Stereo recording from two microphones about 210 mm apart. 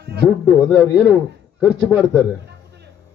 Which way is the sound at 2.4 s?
50° right (ahead or behind).